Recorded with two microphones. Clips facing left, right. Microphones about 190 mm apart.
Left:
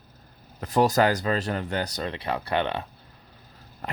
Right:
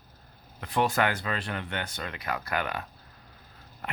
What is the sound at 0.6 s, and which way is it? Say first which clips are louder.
Speech: left 5 dB; 40° left (ahead or behind).